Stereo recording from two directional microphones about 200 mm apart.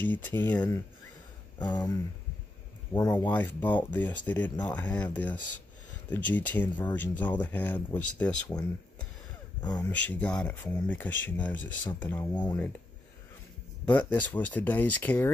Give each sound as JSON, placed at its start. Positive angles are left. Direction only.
{"t": 0.0, "sound": "speech", "side_deg": 10}
{"t": 1.6, "sound": "speech", "side_deg": 20}
{"t": 9.6, "sound": "speech", "side_deg": 20}
{"t": 10.0, "sound": "speech", "side_deg": 5}
{"t": 13.8, "sound": "speech", "side_deg": 10}